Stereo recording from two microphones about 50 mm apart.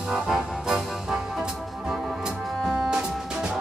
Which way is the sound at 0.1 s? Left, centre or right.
Centre.